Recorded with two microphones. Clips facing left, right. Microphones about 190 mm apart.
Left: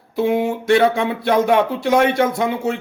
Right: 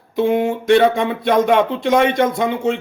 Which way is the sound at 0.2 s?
5° left (ahead or behind).